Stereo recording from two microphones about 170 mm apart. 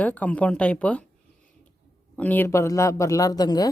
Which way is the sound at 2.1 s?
10° left (ahead or behind).